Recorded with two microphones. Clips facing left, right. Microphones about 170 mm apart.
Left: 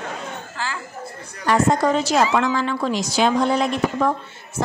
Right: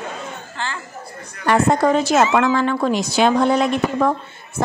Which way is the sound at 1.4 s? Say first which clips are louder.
Right 2 dB; 60° right (ahead or behind).